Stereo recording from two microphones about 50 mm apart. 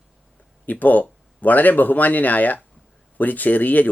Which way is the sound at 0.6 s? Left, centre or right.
Left.